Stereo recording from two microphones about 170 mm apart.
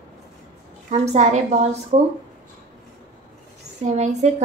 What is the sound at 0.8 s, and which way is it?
A woman's voice, 40° right (ahead or behind).